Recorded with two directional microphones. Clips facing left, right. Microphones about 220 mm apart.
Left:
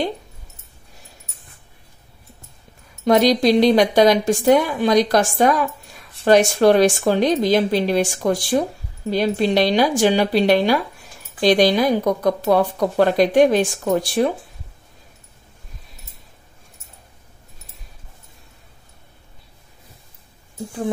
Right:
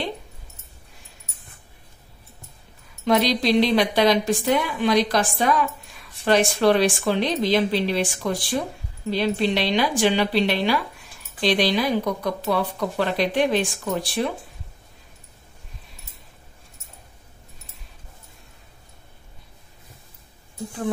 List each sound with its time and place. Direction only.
3.1 s speech: 45° left (ahead or behind)